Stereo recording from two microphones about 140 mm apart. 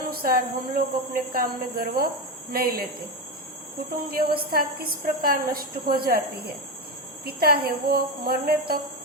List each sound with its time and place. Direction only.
0.1 s a woman's voice: 90° right
4.4 s a woman's voice: 90° right
7.3 s a woman's voice: 90° right